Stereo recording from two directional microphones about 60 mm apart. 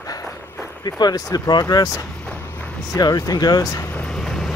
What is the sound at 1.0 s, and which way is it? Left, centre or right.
Speech, left.